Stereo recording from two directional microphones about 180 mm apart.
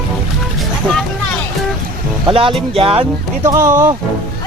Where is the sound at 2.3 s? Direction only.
30° right (ahead or behind).